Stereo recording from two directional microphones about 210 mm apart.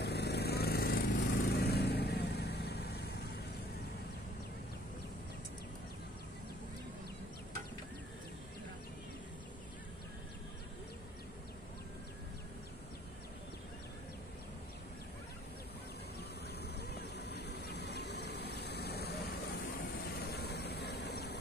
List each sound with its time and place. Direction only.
0.0 s lawn mower: 50° left (ahead or behind)
16.6 s vehicle: 50° left (ahead or behind)